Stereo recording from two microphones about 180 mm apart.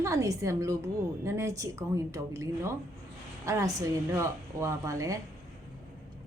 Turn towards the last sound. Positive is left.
turn(degrees=-15)  # may be behind; listen again after turning